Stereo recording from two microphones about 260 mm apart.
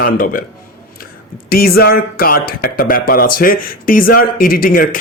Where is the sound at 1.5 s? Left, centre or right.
Left.